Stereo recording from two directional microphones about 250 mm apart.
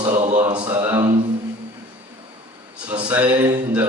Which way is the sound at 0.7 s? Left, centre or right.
Centre.